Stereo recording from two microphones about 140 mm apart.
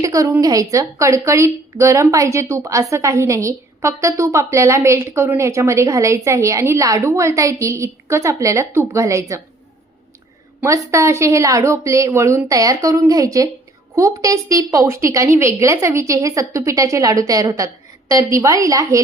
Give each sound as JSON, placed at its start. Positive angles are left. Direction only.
{"t": 0.0, "sound": "a woman's voice", "side_deg": -25}
{"t": 10.6, "sound": "a woman's voice", "side_deg": -20}